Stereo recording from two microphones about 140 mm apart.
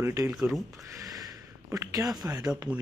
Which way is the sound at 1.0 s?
25° right (ahead or behind).